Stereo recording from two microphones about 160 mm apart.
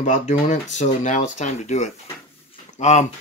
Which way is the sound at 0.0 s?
50° left (ahead or behind).